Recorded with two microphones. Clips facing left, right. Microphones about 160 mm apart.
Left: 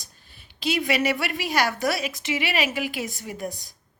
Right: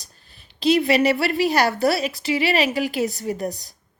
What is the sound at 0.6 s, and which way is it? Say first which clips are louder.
A woman's voice: right 7 dB; 35° right (ahead or behind).